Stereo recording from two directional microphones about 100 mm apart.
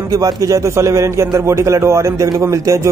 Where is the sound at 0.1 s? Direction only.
35° right (ahead or behind).